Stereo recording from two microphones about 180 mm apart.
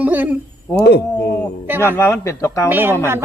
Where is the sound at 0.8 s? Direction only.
65° left (ahead or behind).